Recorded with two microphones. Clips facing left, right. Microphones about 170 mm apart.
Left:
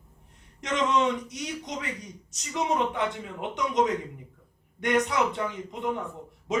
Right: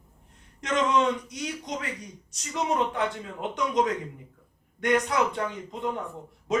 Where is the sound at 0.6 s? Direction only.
20° left (ahead or behind).